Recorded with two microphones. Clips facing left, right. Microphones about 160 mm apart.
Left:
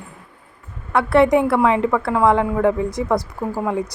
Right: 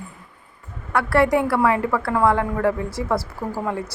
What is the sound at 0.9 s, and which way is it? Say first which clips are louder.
A woman's voice: left 4 dB; 20° left (ahead or behind).